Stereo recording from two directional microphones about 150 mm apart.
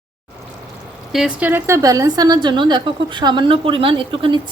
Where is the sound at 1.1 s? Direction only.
5° right (ahead or behind).